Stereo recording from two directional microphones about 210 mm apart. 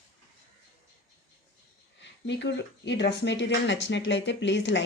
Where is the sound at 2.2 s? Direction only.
55° left (ahead or behind).